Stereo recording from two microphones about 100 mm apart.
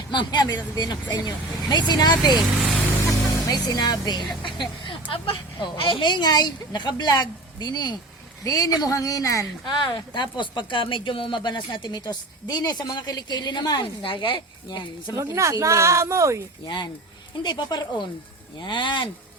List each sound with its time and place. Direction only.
0.1 s speech: 50° left (ahead or behind)
3.4 s a woman's voice: 40° left (ahead or behind)
9.6 s speech: 50° left (ahead or behind)
15.1 s speech: 30° right (ahead or behind)
16.6 s speech: 50° left (ahead or behind)